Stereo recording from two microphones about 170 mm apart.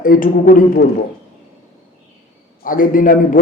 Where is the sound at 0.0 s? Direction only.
55° left (ahead or behind).